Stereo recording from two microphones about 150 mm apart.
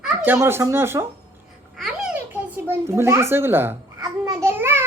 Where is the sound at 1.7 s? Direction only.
Centre (ahead or behind).